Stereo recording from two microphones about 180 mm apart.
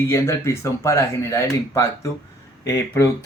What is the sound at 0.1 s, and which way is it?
Speech, 15° left (ahead or behind).